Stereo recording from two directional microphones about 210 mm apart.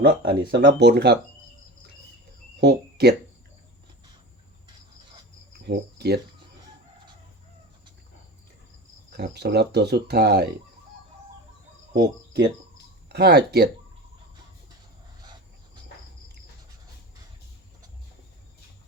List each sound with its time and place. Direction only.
0.0 s speech: 50° right (ahead or behind)
2.6 s speech: 55° right (ahead or behind)
5.6 s cricket: 50° right (ahead or behind)
9.1 s speech: 50° right (ahead or behind)
11.9 s cricket: 55° right (ahead or behind)
13.1 s speech: 50° right (ahead or behind)
15.2 s a sound: 20° right (ahead or behind)